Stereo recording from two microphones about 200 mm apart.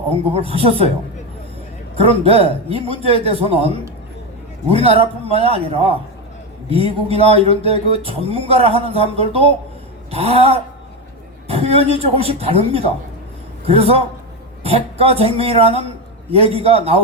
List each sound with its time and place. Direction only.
0.1 s speech: 30° right (ahead or behind)
2.0 s speech: 30° right (ahead or behind)
4.7 s speech: 30° right (ahead or behind)